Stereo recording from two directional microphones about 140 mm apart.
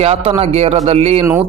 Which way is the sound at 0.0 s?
45° right (ahead or behind).